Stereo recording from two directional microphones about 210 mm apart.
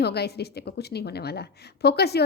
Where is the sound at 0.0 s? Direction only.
50° left (ahead or behind).